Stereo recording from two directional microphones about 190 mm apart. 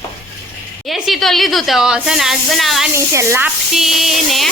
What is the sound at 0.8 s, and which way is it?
A woman's voice, centre (ahead or behind).